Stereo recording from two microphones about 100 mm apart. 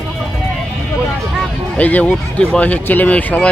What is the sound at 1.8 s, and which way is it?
Speech, 15° left (ahead or behind).